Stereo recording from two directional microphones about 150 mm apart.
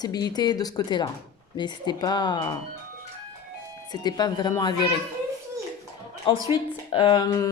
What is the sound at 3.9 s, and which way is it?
Speech, 25° left (ahead or behind).